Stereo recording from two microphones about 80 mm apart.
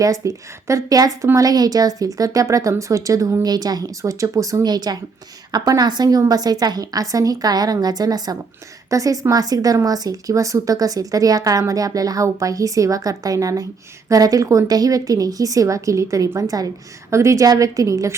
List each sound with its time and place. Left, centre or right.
0.0 s a woman's voice: right
3.4 s a woman's voice: right
4.0 s a woman's voice: right
17.1 s a woman's voice: right